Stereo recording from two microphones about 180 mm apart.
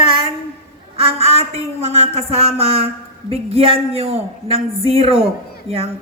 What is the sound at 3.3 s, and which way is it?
A woman's voice, 35° right (ahead or behind).